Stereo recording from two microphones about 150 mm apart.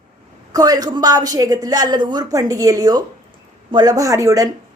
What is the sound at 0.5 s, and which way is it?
A woman's voice, 25° right (ahead or behind).